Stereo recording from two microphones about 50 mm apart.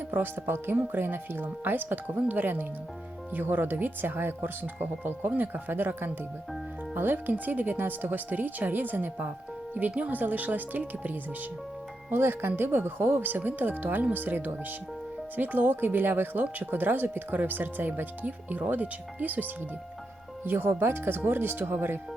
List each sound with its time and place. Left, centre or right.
0.1 s speech: right
12.1 s speech: right
20.4 s speech: right